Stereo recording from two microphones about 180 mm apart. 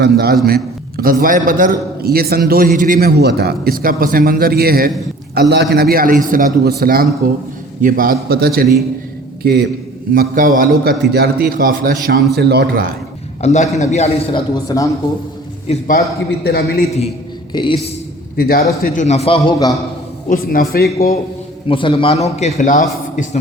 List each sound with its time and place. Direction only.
0.0 s a man's voice: 60° right (ahead or behind)
10.2 s a man's voice: 50° right (ahead or behind)
11.0 s a man's voice: 60° right (ahead or behind)
12.4 s a man's voice: 65° right (ahead or behind)
13.4 s a man's voice: 40° left (ahead or behind); by 14.8 s 20° left (ahead or behind)
16.0 s a man's voice: 65° left (ahead or behind)
17.5 s a man's voice: 25° left (ahead or behind)
18.3 s a man's voice: 55° left (ahead or behind)
18.8 s a man's voice: 40° left (ahead or behind); by 19.7 s 25° left (ahead or behind)
20.3 s a man's voice: 55° left (ahead or behind)
21.7 s a man's voice: 30° left (ahead or behind); by 23.4 s 45° left (ahead or behind)